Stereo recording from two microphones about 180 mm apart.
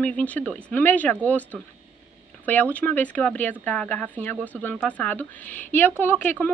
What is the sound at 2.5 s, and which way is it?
Speech, 10° left (ahead or behind).